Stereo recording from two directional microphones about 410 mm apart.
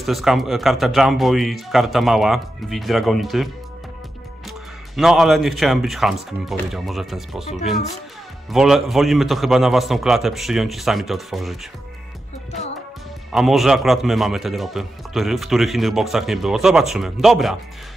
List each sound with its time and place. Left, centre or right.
0.0 s speech: centre
4.5 s speech: centre
8.5 s speech: centre
13.3 s speech: centre